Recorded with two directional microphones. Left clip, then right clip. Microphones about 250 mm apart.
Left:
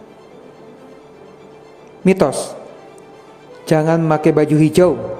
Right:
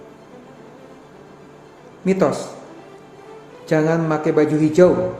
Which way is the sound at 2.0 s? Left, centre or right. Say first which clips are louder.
Left 3 dB; left.